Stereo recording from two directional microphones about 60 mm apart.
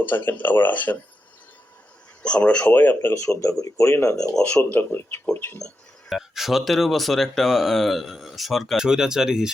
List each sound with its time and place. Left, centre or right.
0.0 s speech: left
2.2 s speech: centre
2.7 s speech: left
3.2 s speech: left
4.5 s speech: left
6.1 s speech: centre